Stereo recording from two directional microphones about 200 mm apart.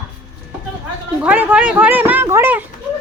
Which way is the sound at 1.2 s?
10° right (ahead or behind).